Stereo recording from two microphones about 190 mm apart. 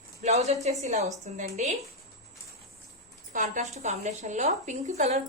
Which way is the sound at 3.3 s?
40° right (ahead or behind).